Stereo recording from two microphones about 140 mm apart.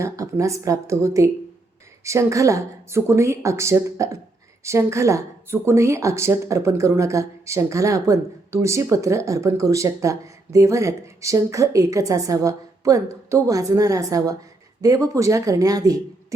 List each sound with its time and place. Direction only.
0.0 s speech: 20° right (ahead or behind)